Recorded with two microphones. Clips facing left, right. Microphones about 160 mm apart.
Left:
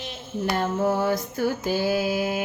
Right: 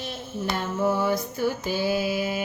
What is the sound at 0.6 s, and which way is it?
Music, 45° left (ahead or behind).